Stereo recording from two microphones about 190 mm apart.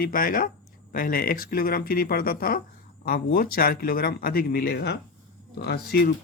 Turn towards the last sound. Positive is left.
turn(degrees=55)  # may be behind; listen again after turning